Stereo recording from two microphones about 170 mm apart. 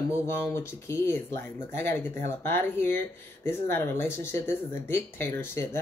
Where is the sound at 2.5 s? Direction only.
15° left (ahead or behind).